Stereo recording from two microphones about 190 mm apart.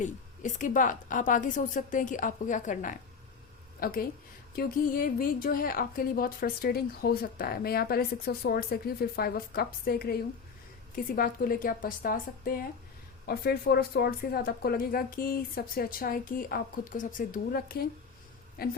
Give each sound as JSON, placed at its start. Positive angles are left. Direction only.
{"t": 0.0, "sound": "a woman's voice", "side_deg": 40}